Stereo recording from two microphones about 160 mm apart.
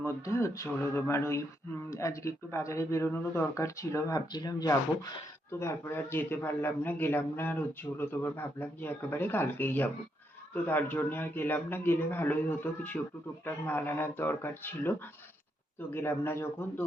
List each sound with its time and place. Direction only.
0.0 s speech: 20° left (ahead or behind)